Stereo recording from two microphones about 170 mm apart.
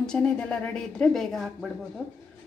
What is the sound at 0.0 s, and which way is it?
Speech, 5° left (ahead or behind).